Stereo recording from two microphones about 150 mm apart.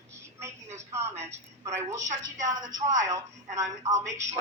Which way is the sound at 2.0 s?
55° right (ahead or behind).